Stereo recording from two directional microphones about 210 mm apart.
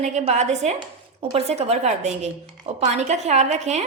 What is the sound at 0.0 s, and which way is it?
A woman's voice, 35° right (ahead or behind).